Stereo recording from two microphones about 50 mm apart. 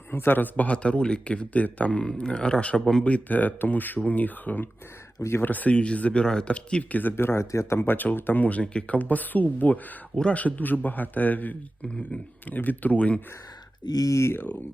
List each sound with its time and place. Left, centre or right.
0.1 s a man's voice: left
7.2 s speech: left
7.5 s speech: left
7.8 s speech: left
11.8 s a man's voice: left
12.5 s speech: left
14.1 s speech: left